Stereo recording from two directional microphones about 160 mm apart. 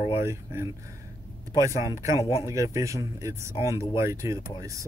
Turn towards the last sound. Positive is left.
turn(degrees=-20)  # may be behind; listen again after turning